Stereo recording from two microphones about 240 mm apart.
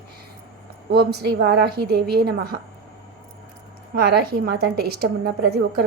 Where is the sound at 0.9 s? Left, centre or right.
Right.